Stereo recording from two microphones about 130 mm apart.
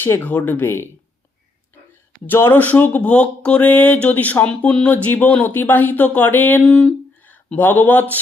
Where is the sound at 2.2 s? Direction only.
15° left (ahead or behind).